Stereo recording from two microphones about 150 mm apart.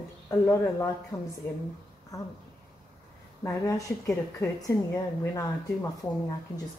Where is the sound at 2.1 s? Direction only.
20° left (ahead or behind).